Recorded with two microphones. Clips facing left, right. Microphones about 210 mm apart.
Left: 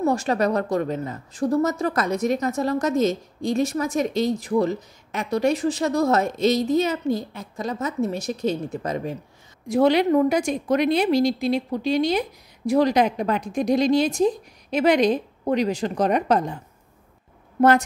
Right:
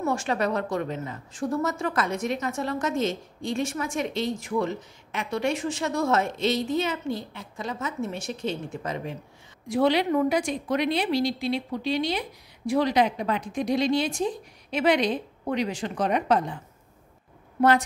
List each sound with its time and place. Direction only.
0.0 s a woman's voice: 40° left (ahead or behind)
17.6 s a woman's voice: 45° left (ahead or behind)